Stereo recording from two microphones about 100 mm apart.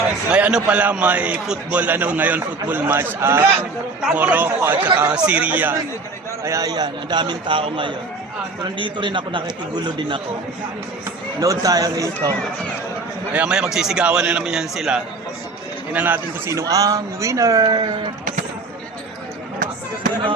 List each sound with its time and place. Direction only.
0.3 s a man's voice: 10° right (ahead or behind)
6.4 s a man's voice: 35° right (ahead or behind); by 10.2 s 50° right (ahead or behind)
11.3 s a man's voice: 35° right (ahead or behind)
13.3 s a man's voice: 10° right (ahead or behind)
15.9 s a man's voice: 15° right (ahead or behind)
16.5 s a man's voice: 35° right (ahead or behind)